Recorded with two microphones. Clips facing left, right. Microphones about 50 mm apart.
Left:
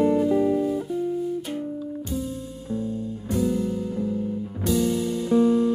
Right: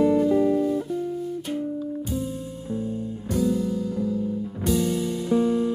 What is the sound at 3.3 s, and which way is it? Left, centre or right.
Music, left.